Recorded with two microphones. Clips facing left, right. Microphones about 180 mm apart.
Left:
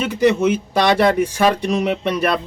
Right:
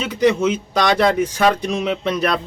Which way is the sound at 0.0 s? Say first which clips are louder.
Left 1 dB; 55° left (ahead or behind).